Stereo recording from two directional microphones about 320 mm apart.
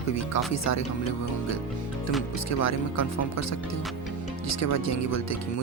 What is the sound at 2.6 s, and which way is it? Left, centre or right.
Speech, left.